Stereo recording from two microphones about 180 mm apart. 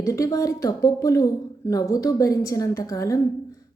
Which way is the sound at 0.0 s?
20° left (ahead or behind).